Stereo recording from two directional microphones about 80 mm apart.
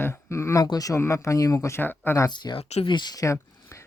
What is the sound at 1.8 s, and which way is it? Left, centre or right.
Speech, left.